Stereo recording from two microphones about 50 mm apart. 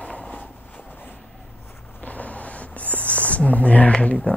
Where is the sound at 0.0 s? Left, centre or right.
Left.